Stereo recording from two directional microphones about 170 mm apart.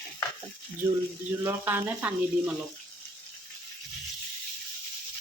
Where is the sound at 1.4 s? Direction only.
10° right (ahead or behind).